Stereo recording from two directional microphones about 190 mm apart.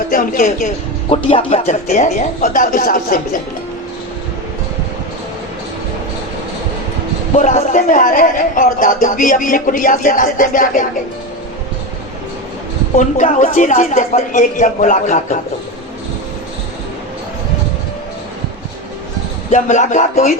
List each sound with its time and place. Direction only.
0.1 s speech: 45° left (ahead or behind)
1.1 s speech: 30° left (ahead or behind); by 3.4 s 45° left (ahead or behind)
7.3 s speech: 40° left (ahead or behind)
13.0 s speech: 40° left (ahead or behind)
19.5 s speech: 40° left (ahead or behind)